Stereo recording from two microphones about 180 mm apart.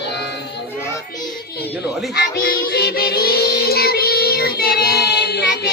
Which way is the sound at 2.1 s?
60° left (ahead or behind).